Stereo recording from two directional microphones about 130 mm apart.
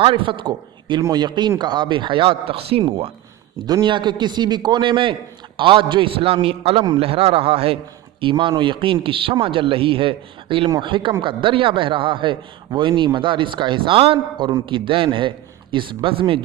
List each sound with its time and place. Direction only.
0.0 s a man's voice: 40° right (ahead or behind)
3.7 s a man's voice: 35° right (ahead or behind)